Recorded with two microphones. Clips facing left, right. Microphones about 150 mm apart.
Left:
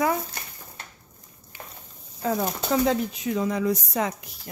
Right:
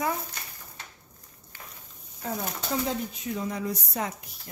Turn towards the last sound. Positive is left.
turn(degrees=90)